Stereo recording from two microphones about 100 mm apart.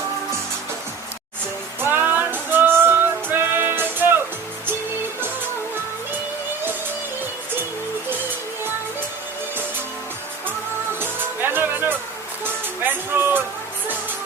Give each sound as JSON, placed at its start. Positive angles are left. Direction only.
{"t": 1.8, "sound": "music", "side_deg": -20}
{"t": 11.0, "sound": "music", "side_deg": -20}